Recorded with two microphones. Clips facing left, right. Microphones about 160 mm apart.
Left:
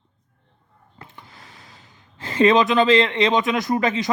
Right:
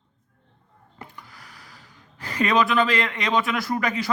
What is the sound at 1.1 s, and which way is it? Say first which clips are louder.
Speech: left 1 dB; 25° left (ahead or behind).